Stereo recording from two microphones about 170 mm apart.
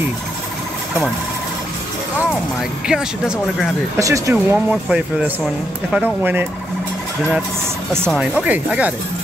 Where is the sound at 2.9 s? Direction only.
5° right (ahead or behind).